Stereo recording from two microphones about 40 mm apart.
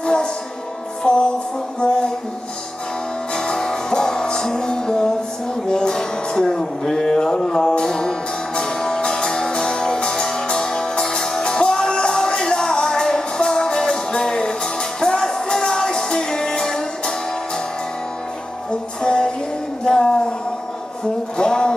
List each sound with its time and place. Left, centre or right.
0.0 s music: centre
3.3 s music: centre
18.7 s music: left
19.8 s a sound: centre
21.4 s music: centre